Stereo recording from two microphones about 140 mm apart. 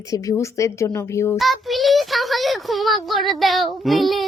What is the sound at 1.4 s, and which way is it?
A child's voice, centre (ahead or behind).